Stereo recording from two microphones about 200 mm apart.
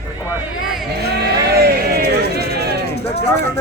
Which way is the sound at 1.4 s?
50° right (ahead or behind).